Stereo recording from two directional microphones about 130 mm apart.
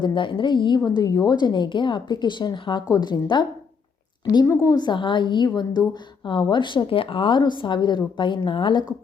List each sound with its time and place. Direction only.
0.0 s a woman's voice: 40° left (ahead or behind)
4.4 s a woman's voice: 30° left (ahead or behind)